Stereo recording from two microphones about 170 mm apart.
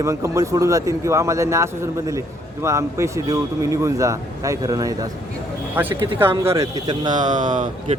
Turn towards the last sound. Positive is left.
turn(degrees=-50)  # may be behind; listen again after turning